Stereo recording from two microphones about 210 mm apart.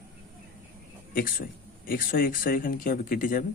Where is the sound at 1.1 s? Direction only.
45° left (ahead or behind).